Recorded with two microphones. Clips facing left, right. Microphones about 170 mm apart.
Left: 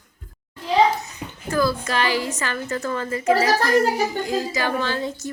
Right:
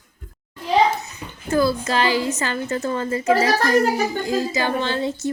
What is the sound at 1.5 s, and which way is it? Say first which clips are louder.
A woman's voice: right 3 dB; 25° right (ahead or behind).